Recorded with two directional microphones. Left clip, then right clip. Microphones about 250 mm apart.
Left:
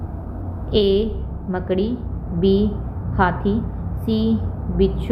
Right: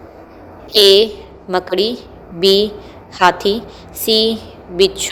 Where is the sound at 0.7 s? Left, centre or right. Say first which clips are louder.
Right 9 dB; right.